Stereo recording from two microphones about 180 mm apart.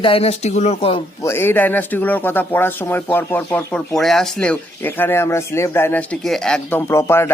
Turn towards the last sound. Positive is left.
turn(degrees=15)  # may be behind; listen again after turning